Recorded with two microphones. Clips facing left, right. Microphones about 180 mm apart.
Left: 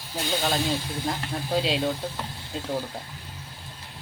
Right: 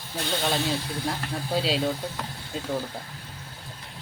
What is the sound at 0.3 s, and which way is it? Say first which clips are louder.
Speech: left 1 dB; centre (ahead or behind).